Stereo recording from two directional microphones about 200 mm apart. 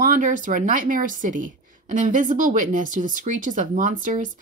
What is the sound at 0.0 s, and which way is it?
Speech, 40° right (ahead or behind).